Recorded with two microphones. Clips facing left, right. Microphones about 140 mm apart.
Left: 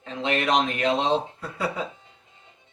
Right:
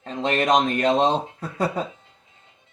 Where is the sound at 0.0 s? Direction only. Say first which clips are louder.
Right 3 dB; 45° right (ahead or behind).